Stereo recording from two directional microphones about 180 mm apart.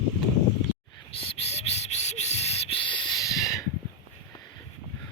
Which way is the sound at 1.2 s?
35° left (ahead or behind).